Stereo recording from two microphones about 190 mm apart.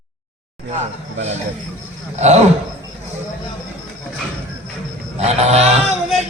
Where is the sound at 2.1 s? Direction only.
35° right (ahead or behind).